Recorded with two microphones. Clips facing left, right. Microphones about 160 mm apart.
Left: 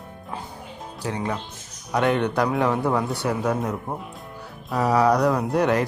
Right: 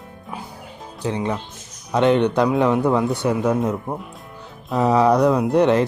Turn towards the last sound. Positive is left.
turn(degrees=-25)  # may be behind; listen again after turning